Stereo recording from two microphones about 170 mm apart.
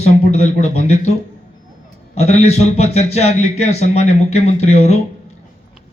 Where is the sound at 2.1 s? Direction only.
40° left (ahead or behind).